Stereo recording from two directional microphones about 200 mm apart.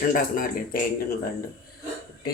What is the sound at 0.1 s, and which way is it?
Speech, 45° left (ahead or behind).